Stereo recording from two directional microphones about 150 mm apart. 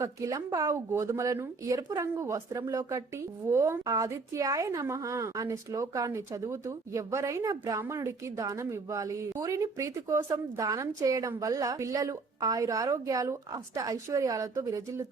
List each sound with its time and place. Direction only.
0.0 s a woman's voice: 20° right (ahead or behind)